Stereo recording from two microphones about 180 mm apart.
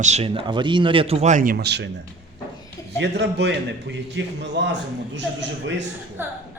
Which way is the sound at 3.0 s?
70° right (ahead or behind).